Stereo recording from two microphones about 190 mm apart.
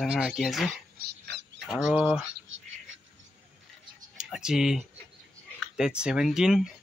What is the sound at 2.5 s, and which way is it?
Dog, 90° right.